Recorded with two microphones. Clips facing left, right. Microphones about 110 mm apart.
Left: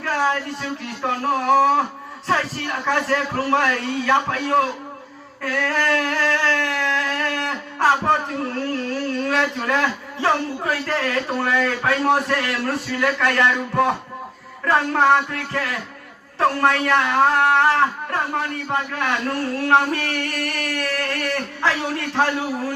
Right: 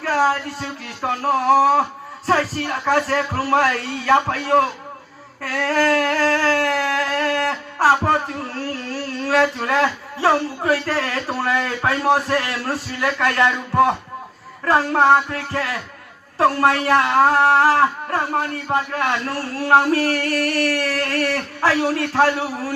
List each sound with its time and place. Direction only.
0.0 s speech: 35° right (ahead or behind)
5.5 s a sound: 40° right (ahead or behind)
8.9 s speech: 35° right (ahead or behind)